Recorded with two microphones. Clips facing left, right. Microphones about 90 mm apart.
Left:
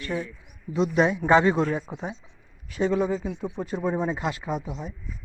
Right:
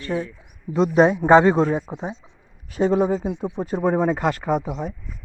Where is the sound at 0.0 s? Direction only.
30° right (ahead or behind).